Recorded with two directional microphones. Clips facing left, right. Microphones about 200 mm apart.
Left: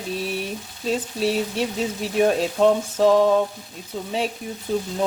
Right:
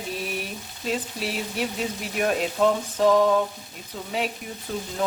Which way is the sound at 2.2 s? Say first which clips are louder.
Left 4 dB; 25° left (ahead or behind).